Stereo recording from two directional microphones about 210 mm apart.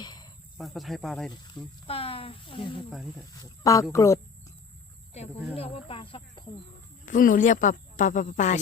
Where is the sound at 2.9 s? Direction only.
Centre (ahead or behind).